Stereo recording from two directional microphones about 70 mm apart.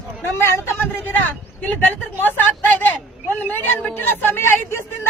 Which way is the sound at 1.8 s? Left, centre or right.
Left.